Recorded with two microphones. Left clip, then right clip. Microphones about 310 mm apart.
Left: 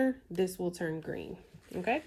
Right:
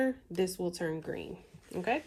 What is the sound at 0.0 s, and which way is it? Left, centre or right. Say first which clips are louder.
Speech: even; centre.